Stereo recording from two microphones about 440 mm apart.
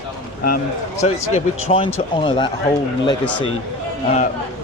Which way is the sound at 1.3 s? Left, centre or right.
Centre.